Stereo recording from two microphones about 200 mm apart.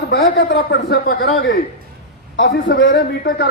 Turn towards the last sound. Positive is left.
turn(degrees=55)  # may be behind; listen again after turning